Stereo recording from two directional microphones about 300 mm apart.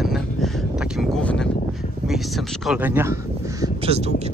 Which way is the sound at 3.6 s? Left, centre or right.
Centre.